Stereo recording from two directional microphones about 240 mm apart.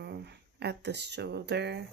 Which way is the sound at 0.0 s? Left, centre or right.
Right.